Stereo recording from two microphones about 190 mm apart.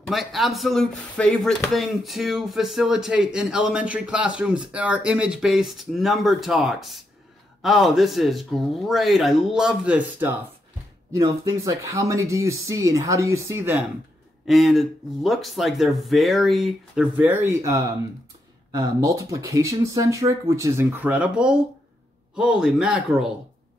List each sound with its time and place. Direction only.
0.0 s speech: centre (ahead or behind)
14.4 s speech: centre (ahead or behind)